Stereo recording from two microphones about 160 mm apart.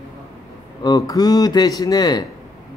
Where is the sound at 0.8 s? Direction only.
25° left (ahead or behind).